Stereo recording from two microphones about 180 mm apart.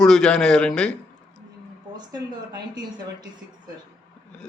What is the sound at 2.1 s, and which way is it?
Speech, 20° right (ahead or behind).